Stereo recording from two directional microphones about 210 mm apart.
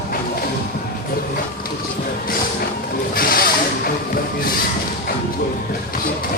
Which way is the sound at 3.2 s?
45° left (ahead or behind).